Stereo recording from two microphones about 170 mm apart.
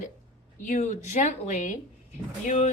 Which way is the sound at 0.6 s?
50° left (ahead or behind).